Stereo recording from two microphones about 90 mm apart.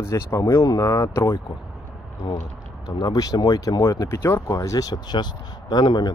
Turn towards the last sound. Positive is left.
turn(degrees=55)  # may be behind; listen again after turning